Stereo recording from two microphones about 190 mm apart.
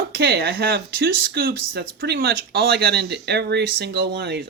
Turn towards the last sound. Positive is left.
turn(degrees=-60)  # may be behind; listen again after turning